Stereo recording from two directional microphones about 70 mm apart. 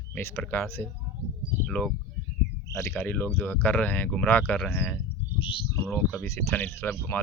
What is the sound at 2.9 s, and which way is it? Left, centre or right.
Speech, left.